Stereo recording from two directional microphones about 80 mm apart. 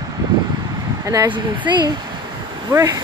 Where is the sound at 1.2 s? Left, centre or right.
Right.